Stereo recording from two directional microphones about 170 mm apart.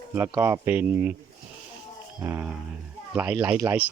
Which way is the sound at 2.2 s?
10° right (ahead or behind).